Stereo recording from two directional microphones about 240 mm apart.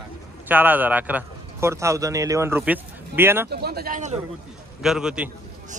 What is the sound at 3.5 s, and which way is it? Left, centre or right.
Speech, right.